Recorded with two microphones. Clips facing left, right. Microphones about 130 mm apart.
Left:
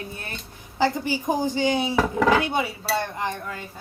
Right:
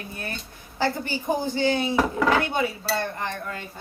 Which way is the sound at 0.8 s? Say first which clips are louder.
Left 3 dB; 15° left (ahead or behind).